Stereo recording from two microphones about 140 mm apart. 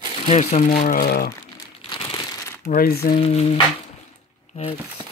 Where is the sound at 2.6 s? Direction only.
90° left.